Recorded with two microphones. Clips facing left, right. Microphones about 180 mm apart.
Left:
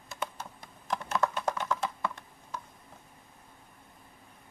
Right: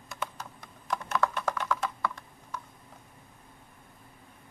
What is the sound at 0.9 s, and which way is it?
Computer keyboard, 25° left (ahead or behind).